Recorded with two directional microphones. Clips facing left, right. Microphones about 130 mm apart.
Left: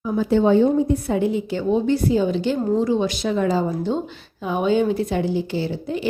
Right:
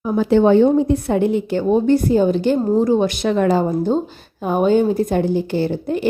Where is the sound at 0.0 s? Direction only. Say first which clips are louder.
Right 4 dB; 65° right (ahead or behind).